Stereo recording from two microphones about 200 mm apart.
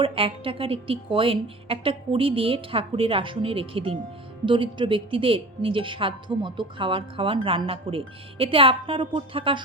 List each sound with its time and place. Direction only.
0.0 s a woman's voice: 25° right (ahead or behind)